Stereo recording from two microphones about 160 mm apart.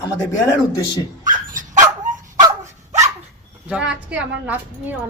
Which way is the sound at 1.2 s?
55° right (ahead or behind).